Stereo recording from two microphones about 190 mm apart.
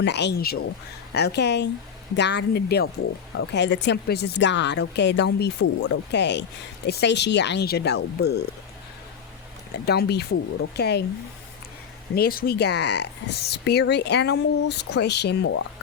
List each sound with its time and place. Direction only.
0.0 s speech: 65° left (ahead or behind)
9.8 s speech: 55° left (ahead or behind)
12.1 s speech: 50° left (ahead or behind); by 15.6 s 80° left